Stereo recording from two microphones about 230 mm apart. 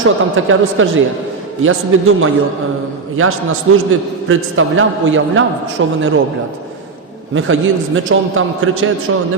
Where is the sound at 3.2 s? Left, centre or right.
Right.